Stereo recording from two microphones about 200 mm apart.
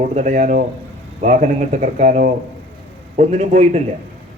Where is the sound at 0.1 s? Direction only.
40° right (ahead or behind).